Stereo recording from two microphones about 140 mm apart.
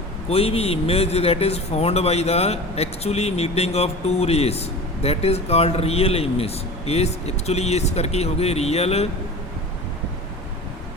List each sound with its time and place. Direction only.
0.3 s speech: 45° left (ahead or behind)